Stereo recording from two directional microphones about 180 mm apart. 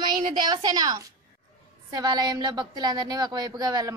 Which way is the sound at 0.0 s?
25° right (ahead or behind).